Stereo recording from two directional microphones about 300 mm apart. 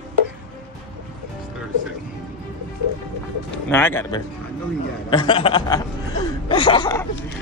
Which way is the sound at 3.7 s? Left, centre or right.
Centre.